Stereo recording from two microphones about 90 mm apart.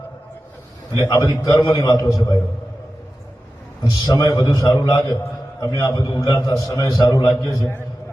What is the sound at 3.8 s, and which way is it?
A man's voice, 45° left (ahead or behind).